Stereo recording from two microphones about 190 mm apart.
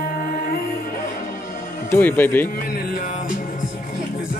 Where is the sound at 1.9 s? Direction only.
10° left (ahead or behind).